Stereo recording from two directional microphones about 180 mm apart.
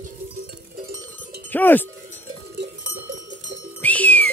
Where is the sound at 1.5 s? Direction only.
10° left (ahead or behind).